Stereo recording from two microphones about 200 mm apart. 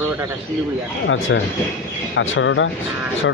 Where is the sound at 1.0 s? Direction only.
70° left (ahead or behind).